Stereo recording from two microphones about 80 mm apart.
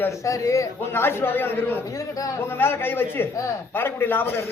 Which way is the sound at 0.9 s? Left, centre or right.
Left.